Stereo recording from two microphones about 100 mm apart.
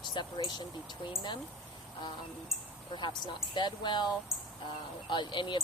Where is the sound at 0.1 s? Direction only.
50° left (ahead or behind).